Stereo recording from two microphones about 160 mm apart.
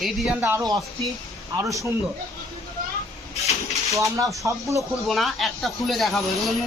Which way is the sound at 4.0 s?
20° right (ahead or behind).